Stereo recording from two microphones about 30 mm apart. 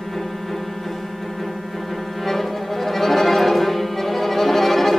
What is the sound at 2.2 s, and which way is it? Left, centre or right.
Music, centre.